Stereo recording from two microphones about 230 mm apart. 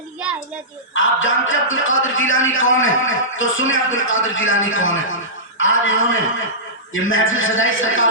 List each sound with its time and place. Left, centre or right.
0.9 s a man's voice: left